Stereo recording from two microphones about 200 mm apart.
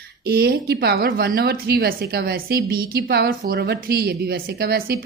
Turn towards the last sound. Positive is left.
turn(degrees=-50)  # may be behind; listen again after turning